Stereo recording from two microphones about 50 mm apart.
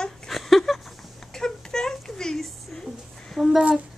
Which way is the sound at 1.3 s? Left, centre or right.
Centre.